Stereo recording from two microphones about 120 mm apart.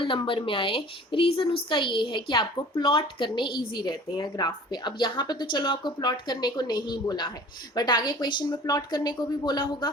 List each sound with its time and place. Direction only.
0.0 s a woman's voice: 45° left (ahead or behind)